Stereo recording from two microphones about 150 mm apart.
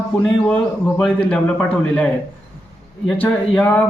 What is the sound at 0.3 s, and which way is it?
A man's voice, 5° left (ahead or behind).